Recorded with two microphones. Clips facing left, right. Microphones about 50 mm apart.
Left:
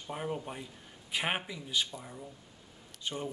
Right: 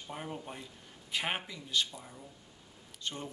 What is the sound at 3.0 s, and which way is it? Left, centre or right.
Speech, centre.